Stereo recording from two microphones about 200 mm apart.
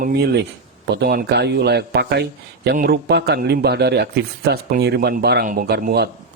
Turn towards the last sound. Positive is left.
turn(degrees=-50)  # may be behind; listen again after turning